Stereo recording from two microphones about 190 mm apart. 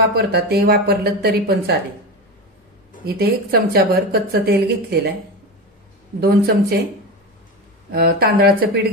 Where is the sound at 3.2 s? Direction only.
55° right (ahead or behind).